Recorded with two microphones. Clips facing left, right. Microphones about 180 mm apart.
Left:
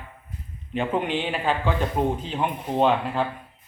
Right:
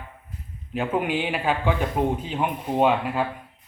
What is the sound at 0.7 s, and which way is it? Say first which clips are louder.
Speech: even; 5° right (ahead or behind).